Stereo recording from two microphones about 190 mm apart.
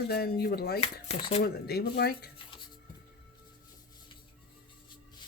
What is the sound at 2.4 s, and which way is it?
Music, 25° left (ahead or behind).